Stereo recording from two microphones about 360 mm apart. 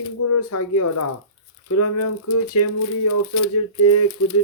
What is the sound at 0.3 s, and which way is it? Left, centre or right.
Speech, left.